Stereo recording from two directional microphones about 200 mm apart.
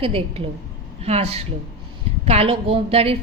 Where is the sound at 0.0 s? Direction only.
30° right (ahead or behind).